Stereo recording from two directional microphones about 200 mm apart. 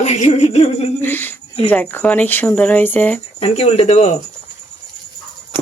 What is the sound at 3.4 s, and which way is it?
Speech, 30° left (ahead or behind).